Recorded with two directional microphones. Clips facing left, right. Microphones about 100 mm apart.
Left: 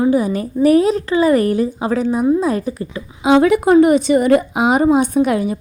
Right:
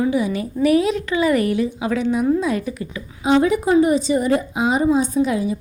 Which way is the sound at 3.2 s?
80° left.